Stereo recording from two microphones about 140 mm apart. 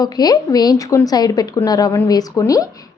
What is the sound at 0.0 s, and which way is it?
A woman's voice, 30° left (ahead or behind).